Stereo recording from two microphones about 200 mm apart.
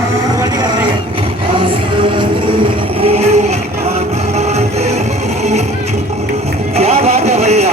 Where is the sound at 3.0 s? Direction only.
35° right (ahead or behind).